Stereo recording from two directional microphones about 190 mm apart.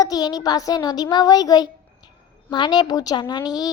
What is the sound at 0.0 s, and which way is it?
A child's voice, 20° left (ahead or behind).